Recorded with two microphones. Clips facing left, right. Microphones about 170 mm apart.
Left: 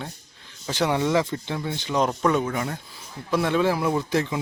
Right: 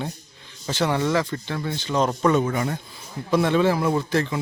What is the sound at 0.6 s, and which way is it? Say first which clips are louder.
Speech: even; 15° left (ahead or behind).